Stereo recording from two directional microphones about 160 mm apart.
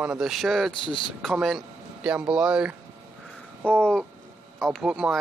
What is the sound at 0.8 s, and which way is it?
Speech, 30° left (ahead or behind).